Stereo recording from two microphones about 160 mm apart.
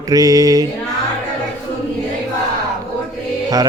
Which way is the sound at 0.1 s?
20° right (ahead or behind).